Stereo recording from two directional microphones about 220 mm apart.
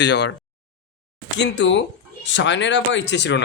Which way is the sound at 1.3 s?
50° left (ahead or behind).